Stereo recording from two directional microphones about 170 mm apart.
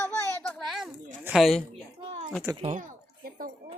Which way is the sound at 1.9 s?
30° right (ahead or behind).